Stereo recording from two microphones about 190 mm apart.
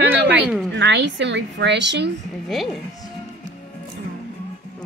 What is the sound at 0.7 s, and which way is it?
A woman's voice, 70° right (ahead or behind).